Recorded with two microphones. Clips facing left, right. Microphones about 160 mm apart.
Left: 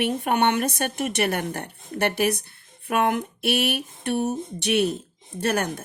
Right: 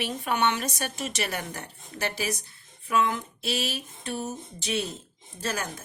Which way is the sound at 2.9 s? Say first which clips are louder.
Left 3 dB; 60° left (ahead or behind).